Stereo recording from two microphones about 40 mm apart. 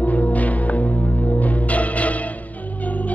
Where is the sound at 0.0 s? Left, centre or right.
Left.